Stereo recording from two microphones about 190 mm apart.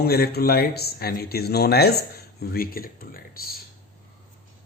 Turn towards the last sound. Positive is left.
turn(degrees=50)  # may be behind; listen again after turning